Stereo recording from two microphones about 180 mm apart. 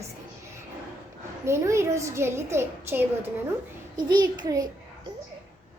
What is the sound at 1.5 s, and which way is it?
A child's voice, 15° right (ahead or behind).